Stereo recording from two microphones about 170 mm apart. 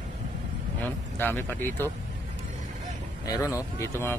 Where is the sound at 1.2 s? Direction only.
10° left (ahead or behind).